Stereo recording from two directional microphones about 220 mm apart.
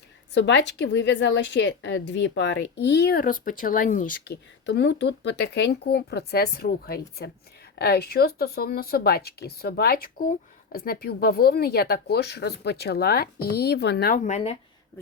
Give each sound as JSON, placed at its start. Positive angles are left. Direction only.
{"t": 0.3, "sound": "speech", "side_deg": 55}
{"t": 4.3, "sound": "speech", "side_deg": 55}
{"t": 14.3, "sound": "speech", "side_deg": 30}